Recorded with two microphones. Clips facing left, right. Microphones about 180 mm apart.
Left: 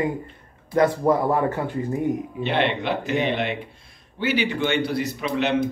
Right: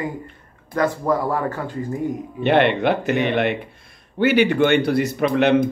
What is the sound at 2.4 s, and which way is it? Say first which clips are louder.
A man's voice: right 9 dB; 55° right (ahead or behind).